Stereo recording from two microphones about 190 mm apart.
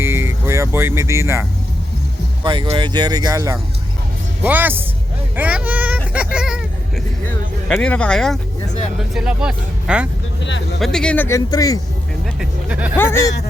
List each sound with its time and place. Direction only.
0.0 s music: 15° right (ahead or behind)
2.4 s a man's voice: 25° right (ahead or behind)
5.4 s a sound: 10° right (ahead or behind)
7.3 s speech: 5° left (ahead or behind)
12.2 s speech: 5° right (ahead or behind)